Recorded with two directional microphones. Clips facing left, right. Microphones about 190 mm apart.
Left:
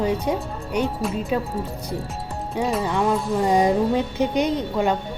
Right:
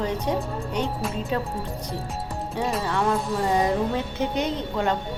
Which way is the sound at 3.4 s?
15° left (ahead or behind).